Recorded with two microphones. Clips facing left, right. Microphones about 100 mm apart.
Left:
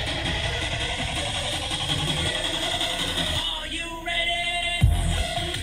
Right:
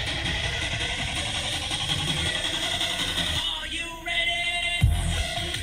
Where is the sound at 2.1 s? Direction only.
45° left (ahead or behind).